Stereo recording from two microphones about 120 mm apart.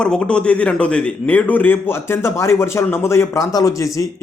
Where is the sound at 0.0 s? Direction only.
10° left (ahead or behind).